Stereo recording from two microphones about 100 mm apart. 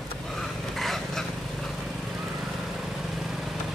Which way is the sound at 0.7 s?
Centre (ahead or behind).